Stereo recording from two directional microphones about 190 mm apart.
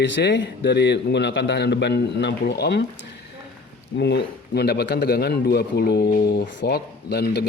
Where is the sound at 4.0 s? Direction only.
60° left (ahead or behind).